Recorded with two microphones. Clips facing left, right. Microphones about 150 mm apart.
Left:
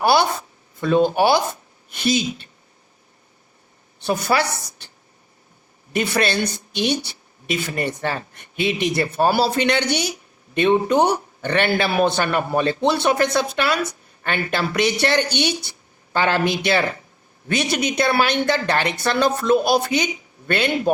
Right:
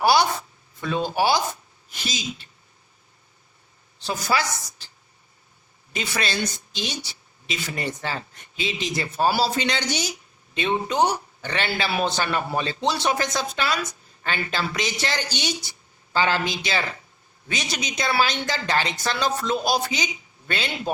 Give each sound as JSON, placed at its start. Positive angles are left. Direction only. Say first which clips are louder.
{"t": 0.0, "sound": "a sound", "louder": "left 2 dB", "side_deg": 55}
{"t": 0.8, "sound": "speech", "louder": "left 7 dB", "side_deg": 50}
{"t": 4.0, "sound": "speech", "louder": "left 5 dB", "side_deg": 60}
{"t": 5.9, "sound": "speech", "louder": "left 7 dB", "side_deg": 60}